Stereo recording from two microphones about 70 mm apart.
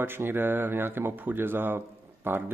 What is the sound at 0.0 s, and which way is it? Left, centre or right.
Speech, right.